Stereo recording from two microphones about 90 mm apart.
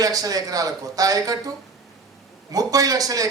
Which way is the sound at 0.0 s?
45° right (ahead or behind).